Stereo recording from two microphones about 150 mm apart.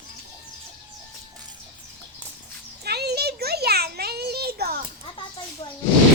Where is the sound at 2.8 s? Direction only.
90° right.